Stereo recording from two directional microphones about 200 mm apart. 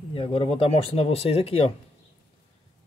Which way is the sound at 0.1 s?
25° left (ahead or behind).